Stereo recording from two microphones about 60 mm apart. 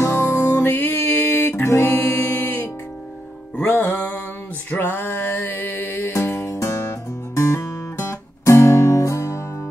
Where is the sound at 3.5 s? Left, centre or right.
Left.